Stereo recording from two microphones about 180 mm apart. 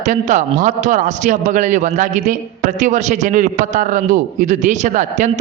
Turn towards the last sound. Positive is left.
turn(degrees=-45)  # may be behind; listen again after turning